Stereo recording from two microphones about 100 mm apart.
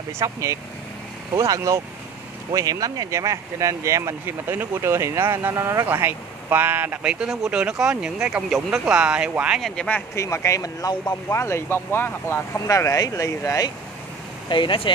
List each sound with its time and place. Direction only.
0.2 s speech: 30° right (ahead or behind); by 9.6 s 10° right (ahead or behind)
9.6 s speech: centre (ahead or behind)
10.1 s speech: 30° left (ahead or behind)
11.2 s speech: 25° left (ahead or behind)
14.5 s speech: 55° left (ahead or behind)